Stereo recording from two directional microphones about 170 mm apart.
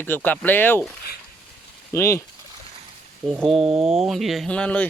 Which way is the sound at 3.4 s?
Centre (ahead or behind).